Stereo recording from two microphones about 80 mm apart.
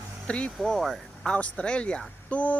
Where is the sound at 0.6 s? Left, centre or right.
Centre.